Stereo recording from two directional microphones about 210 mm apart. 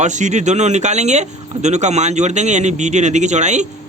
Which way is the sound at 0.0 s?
35° right (ahead or behind).